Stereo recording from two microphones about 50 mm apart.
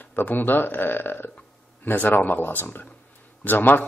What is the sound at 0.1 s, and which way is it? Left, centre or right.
Speech, left.